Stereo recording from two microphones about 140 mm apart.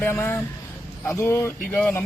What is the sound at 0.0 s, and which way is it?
Speech, 15° left (ahead or behind).